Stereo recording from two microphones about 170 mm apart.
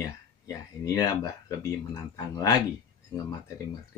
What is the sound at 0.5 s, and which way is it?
Speech, 20° left (ahead or behind).